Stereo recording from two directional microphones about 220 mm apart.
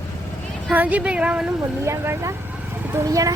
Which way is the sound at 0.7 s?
5° right (ahead or behind).